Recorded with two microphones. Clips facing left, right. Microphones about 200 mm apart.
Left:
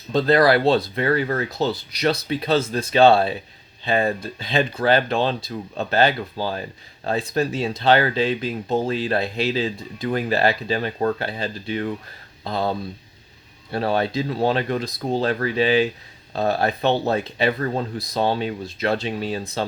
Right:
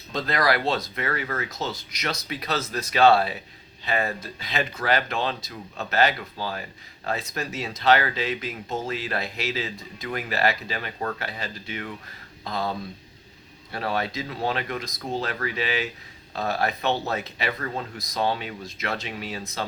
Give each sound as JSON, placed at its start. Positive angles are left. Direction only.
{"t": 0.1, "sound": "speech", "side_deg": 30}